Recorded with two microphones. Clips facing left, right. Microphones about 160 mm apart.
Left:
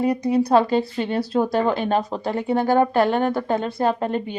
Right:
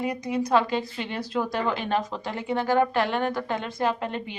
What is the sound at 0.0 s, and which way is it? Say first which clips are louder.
Speech: left 8 dB; 35° left (ahead or behind).